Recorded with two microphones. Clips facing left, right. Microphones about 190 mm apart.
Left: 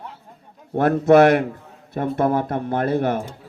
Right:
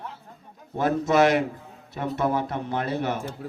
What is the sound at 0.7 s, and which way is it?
A man's voice, 60° left (ahead or behind).